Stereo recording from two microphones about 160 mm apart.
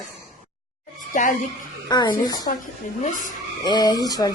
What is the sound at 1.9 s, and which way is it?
Fowl, 25° left (ahead or behind).